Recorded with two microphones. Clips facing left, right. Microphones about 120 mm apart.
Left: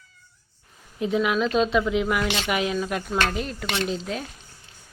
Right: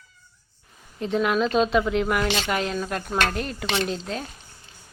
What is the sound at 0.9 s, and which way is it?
A woman's voice, 5° left (ahead or behind).